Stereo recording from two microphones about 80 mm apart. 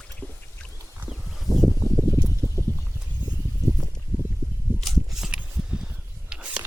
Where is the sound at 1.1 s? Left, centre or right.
Centre.